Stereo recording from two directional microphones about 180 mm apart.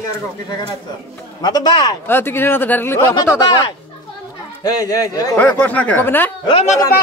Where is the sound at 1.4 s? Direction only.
25° left (ahead or behind).